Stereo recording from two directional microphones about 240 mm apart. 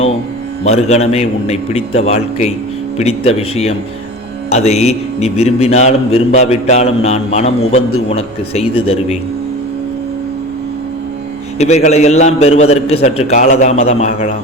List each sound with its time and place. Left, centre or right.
0.6 s a man's voice: left
11.5 s a man's voice: left